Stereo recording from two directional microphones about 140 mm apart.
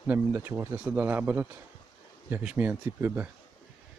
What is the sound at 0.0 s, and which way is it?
Speech, 15° right (ahead or behind).